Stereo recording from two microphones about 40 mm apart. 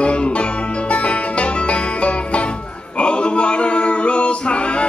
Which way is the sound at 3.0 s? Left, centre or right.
Left.